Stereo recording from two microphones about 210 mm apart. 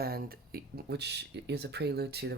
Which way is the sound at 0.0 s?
45° right (ahead or behind).